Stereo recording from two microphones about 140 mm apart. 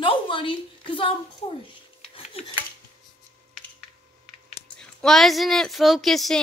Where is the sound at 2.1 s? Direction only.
45° left (ahead or behind).